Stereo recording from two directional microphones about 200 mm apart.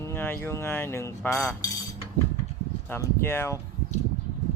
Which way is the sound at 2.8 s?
10° left (ahead or behind).